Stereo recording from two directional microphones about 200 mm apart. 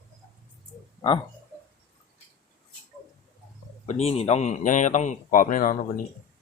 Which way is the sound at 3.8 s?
35° left (ahead or behind).